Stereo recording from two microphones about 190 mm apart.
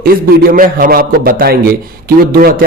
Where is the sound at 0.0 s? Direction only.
50° right (ahead or behind).